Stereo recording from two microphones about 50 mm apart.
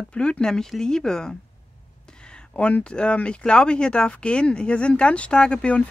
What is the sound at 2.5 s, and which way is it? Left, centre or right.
Speech, left.